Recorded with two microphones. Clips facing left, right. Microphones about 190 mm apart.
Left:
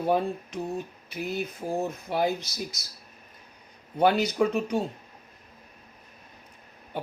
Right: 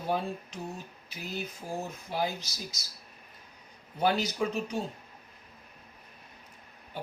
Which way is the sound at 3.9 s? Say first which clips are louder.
Left 6 dB; 60° left (ahead or behind).